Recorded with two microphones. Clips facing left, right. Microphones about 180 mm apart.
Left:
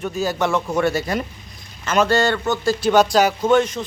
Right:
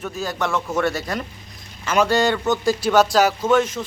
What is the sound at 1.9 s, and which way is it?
A man's voice, 10° right (ahead or behind).